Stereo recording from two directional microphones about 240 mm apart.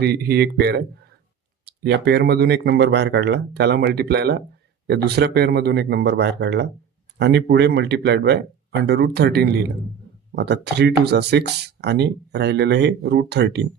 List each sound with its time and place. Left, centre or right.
0.0 s speech: right